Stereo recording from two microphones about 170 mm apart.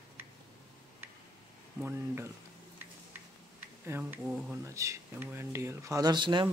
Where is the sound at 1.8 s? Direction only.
15° right (ahead or behind).